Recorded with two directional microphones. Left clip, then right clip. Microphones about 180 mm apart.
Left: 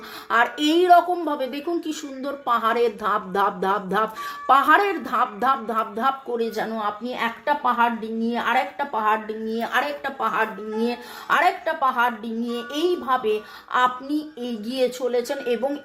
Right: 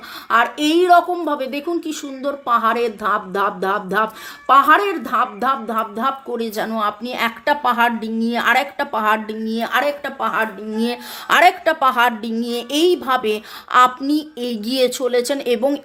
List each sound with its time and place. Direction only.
0.3 s speech: 20° right (ahead or behind)
11.3 s a woman's voice: 60° right (ahead or behind)